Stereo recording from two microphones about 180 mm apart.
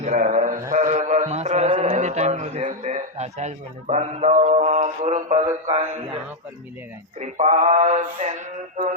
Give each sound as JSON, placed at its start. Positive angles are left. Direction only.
{"t": 0.0, "sound": "a sound", "side_deg": -45}
{"t": 0.7, "sound": "a man's voice", "side_deg": -45}
{"t": 7.2, "sound": "male singing", "side_deg": -40}